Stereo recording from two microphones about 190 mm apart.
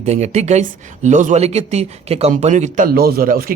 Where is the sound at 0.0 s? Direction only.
35° right (ahead or behind).